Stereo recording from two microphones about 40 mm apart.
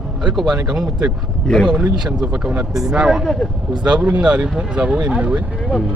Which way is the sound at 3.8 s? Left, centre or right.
Right.